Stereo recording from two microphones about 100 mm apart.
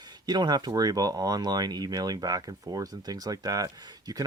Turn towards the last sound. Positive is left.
turn(degrees=-35)  # may be behind; listen again after turning